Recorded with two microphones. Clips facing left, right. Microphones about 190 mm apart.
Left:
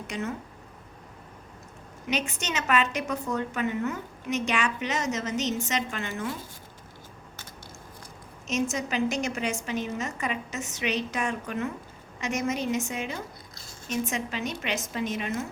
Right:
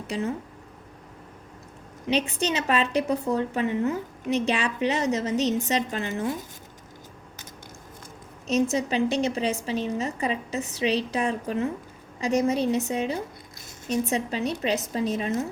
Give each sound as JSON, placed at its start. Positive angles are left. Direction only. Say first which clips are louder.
{"t": 0.1, "sound": "a woman's voice", "louder": "right 4 dB", "side_deg": -30}
{"t": 2.0, "sound": "a woman's voice", "louder": "right 6 dB", "side_deg": -30}
{"t": 8.7, "sound": "a woman's voice", "louder": "right 4 dB", "side_deg": -30}